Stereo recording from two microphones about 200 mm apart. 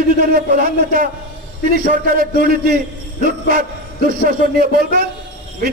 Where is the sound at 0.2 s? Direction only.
45° right (ahead or behind).